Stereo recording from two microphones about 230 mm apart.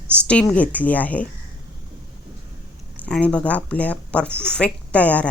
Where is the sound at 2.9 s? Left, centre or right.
Centre.